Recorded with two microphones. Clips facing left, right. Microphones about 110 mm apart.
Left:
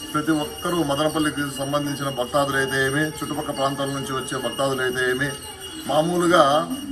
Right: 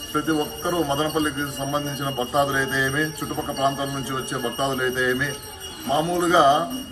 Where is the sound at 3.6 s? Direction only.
20° left (ahead or behind).